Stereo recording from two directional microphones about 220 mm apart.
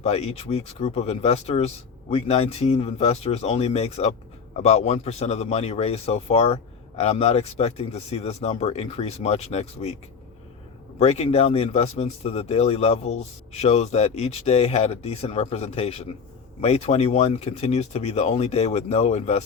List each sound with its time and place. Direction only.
0.0 s a man's voice: 30° left (ahead or behind)
11.0 s a man's voice: 30° left (ahead or behind)